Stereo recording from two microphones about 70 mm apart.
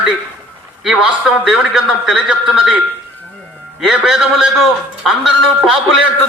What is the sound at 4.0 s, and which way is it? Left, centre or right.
A man's voice, centre.